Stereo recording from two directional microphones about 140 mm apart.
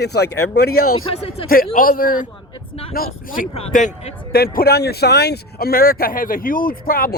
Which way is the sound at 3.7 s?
65° left (ahead or behind).